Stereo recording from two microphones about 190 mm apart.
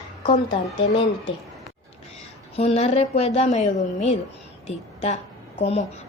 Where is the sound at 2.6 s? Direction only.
35° left (ahead or behind).